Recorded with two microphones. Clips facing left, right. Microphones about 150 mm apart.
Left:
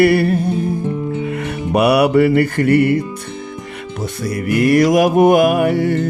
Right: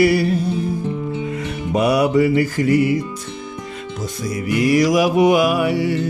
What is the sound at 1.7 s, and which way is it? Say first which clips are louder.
Music: left 3 dB; 70° left (ahead or behind).